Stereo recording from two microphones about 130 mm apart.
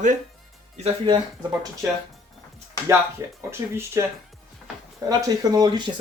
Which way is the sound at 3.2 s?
25° right (ahead or behind).